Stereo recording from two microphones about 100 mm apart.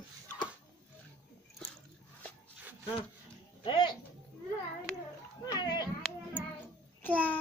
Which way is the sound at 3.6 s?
50° left (ahead or behind).